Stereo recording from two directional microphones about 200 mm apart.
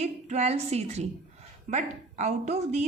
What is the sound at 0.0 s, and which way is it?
A woman's voice, 35° right (ahead or behind).